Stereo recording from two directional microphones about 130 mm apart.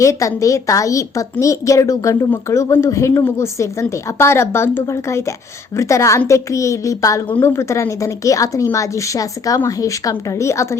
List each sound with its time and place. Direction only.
0.0 s a woman's voice: 25° left (ahead or behind)